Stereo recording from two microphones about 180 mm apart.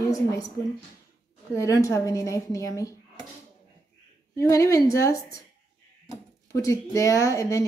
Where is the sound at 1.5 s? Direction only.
15° left (ahead or behind).